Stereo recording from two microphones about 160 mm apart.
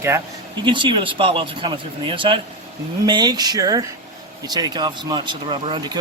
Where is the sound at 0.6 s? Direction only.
30° right (ahead or behind).